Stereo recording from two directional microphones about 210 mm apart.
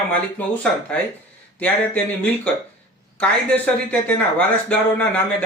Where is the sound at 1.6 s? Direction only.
5° left (ahead or behind).